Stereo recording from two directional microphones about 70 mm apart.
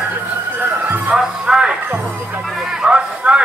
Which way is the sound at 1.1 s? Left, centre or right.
Centre.